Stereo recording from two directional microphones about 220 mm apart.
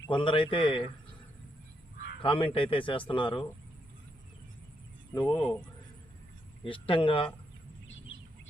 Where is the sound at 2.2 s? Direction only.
25° left (ahead or behind).